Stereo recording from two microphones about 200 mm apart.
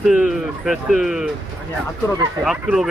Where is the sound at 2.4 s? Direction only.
5° right (ahead or behind).